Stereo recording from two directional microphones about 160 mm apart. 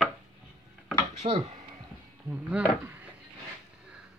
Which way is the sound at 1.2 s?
40° right (ahead or behind).